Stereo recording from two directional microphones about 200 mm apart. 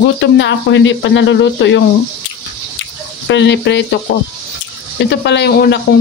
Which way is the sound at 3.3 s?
60° left (ahead or behind).